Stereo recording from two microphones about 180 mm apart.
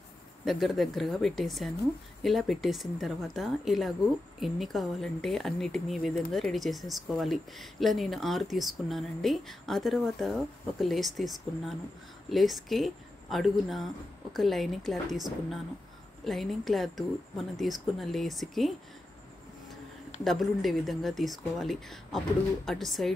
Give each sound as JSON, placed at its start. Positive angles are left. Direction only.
{"t": 0.5, "sound": "speech", "side_deg": 0}
{"t": 16.3, "sound": "speech", "side_deg": 0}
{"t": 20.2, "sound": "speech", "side_deg": 0}